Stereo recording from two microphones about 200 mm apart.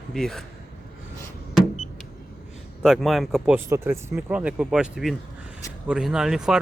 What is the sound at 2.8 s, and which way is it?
Speech, centre (ahead or behind).